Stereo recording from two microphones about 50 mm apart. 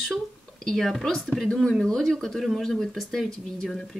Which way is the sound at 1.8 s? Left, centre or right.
Centre.